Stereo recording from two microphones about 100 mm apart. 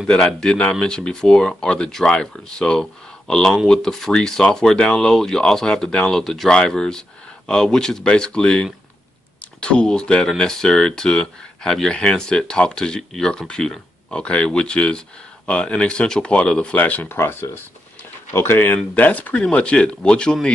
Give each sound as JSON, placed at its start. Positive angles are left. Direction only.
{"t": 0.0, "sound": "speech", "side_deg": 5}